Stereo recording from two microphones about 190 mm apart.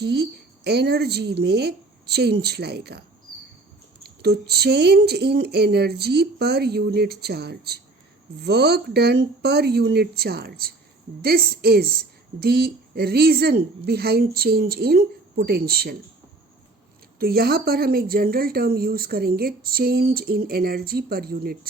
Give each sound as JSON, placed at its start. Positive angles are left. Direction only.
{"t": 0.0, "sound": "speech", "side_deg": -60}
{"t": 4.0, "sound": "speech", "side_deg": -55}
{"t": 17.2, "sound": "a woman's voice", "side_deg": -50}